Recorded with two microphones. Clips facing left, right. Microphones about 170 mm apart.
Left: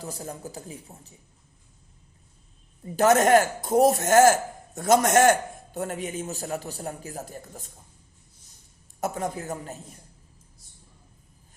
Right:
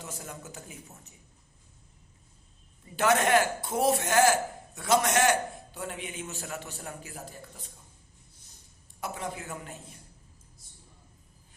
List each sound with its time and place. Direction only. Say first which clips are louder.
0.0 s speech: left 6 dB; 35° left (ahead or behind)
2.8 s a man's voice: left 6 dB; 40° left (ahead or behind)
9.0 s a man's voice: left 7 dB; 45° left (ahead or behind)